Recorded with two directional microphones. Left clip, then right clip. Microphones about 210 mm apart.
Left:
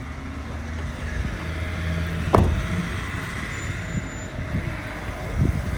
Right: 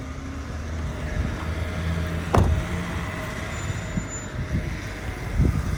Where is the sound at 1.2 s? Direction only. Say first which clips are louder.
Even; 45° right (ahead or behind).